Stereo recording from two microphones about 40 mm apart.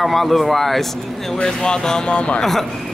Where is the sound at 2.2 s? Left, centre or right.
Left.